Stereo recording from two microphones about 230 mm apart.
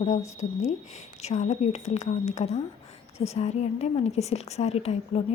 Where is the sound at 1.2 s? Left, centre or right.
Left.